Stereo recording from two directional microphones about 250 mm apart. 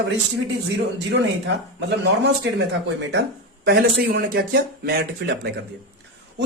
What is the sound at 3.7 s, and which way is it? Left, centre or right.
Speech, right.